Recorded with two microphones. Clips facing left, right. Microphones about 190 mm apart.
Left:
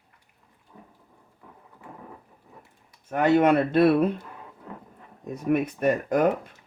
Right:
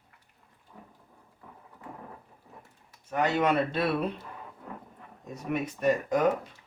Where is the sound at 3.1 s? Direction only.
55° left (ahead or behind).